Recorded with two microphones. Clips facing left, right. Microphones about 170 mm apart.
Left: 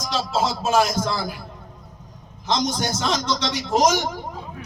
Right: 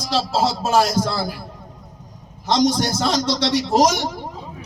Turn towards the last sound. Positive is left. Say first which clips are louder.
# right 2 dB
turn(degrees=-35)  # may be behind; listen again after turning